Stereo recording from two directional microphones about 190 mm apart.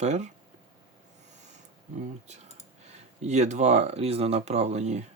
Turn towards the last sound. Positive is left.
turn(degrees=-35)  # may be behind; listen again after turning